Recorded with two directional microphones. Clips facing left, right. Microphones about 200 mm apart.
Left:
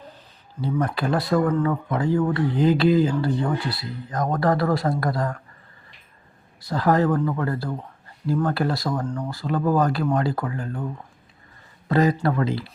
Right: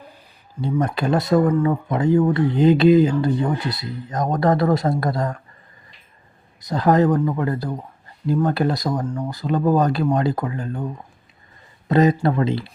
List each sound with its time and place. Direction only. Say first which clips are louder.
0.7 s speech: right 3 dB; 20° right (ahead or behind)
6.6 s speech: right 3 dB; 20° right (ahead or behind)